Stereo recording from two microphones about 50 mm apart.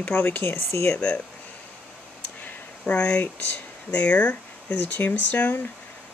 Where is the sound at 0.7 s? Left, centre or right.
Left.